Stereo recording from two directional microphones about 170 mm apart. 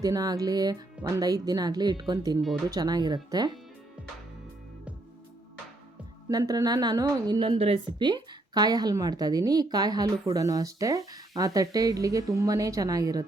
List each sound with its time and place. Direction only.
0.0 s a woman's voice: 20° right (ahead or behind)
6.2 s a woman's voice: 20° right (ahead or behind)